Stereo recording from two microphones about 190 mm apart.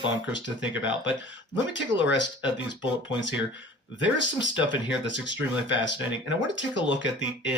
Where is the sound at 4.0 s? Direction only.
70° left (ahead or behind).